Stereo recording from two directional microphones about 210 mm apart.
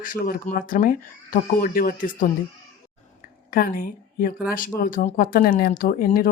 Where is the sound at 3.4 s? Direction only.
45° left (ahead or behind).